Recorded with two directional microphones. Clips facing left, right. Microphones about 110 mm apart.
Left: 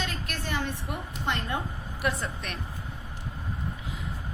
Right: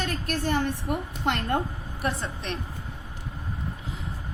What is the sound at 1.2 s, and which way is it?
Speech, 60° right (ahead or behind).